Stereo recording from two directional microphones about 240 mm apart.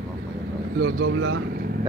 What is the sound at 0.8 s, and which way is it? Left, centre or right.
Speech, right.